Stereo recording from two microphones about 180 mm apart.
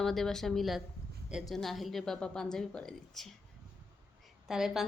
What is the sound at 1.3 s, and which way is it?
A woman's voice, centre (ahead or behind).